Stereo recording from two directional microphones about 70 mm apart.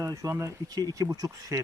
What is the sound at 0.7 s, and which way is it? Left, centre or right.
Speech, right.